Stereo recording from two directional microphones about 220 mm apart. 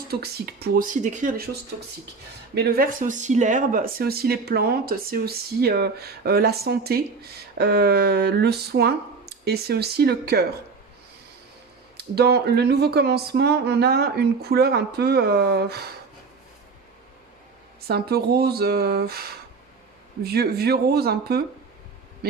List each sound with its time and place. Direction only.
0.1 s speech: 45° right (ahead or behind)
2.6 s speech: 45° right (ahead or behind)
11.9 s speech: 45° right (ahead or behind)
17.8 s speech: 45° right (ahead or behind)